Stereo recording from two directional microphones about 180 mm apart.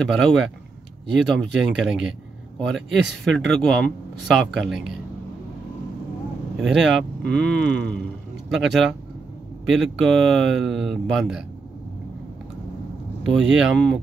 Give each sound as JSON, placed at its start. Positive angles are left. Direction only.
{"t": 0.0, "sound": "speech", "side_deg": 0}
{"t": 6.5, "sound": "speech", "side_deg": 0}
{"t": 13.3, "sound": "speech", "side_deg": 0}